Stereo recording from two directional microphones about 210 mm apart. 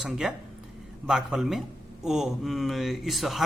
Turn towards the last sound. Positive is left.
turn(degrees=0)  # may be behind; listen again after turning